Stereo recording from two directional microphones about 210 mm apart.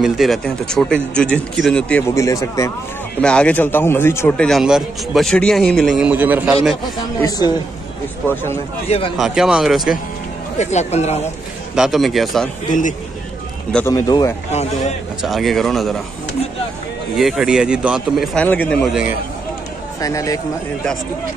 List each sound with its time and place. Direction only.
0.0 s a man's voice: centre (ahead or behind)
7.2 s a woman's voice: 20° left (ahead or behind)
8.8 s a man's voice: 30° left (ahead or behind)
9.1 s a man's voice: centre (ahead or behind)
10.6 s speech: 35° left (ahead or behind)
11.7 s a man's voice: centre (ahead or behind)
12.6 s speech: 40° left (ahead or behind)
13.7 s a man's voice: 5° left (ahead or behind)
13.9 s a woman's voice: 15° left (ahead or behind)
14.5 s speech: 30° left (ahead or behind)
15.2 s a man's voice: centre (ahead or behind)
17.2 s a man's voice: centre (ahead or behind)
20.0 s a woman's voice: 15° left (ahead or behind)